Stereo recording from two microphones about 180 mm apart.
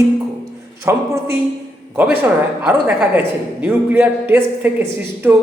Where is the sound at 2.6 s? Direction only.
5° right (ahead or behind).